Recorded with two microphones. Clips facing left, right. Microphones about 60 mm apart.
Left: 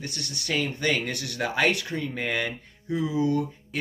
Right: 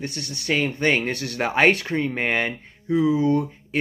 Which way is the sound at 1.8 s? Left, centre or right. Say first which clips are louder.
Right 6 dB; right.